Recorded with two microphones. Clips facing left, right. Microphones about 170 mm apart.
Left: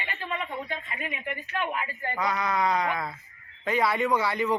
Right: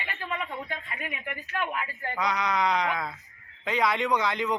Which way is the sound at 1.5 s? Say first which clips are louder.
Left 1 dB; 25° left (ahead or behind).